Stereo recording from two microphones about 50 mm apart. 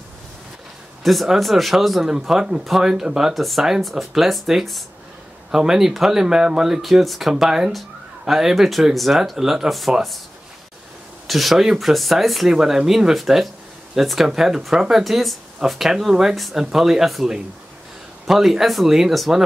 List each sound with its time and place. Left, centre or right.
1.0 s speech: centre
2.0 s speech: centre
3.3 s speech: centre
11.2 s speech: centre